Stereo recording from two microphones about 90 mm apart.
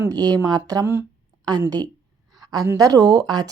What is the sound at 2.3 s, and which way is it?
Speech, 45° right (ahead or behind).